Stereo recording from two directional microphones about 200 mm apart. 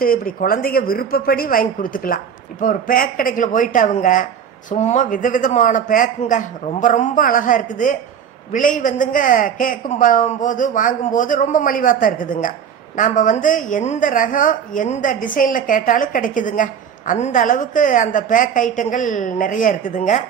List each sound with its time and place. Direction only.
0.0 s a woman's voice: 45° left (ahead or behind)